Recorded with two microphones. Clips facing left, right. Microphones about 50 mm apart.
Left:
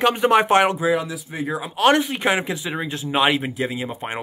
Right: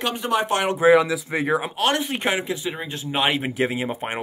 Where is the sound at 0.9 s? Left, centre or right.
Right.